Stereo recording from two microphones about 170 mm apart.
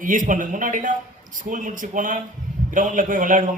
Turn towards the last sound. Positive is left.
turn(degrees=-50)  # may be behind; listen again after turning